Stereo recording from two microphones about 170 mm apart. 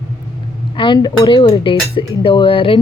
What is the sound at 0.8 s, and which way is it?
Speech, 25° left (ahead or behind).